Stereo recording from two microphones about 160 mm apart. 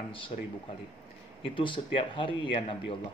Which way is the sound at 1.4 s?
30° left (ahead or behind).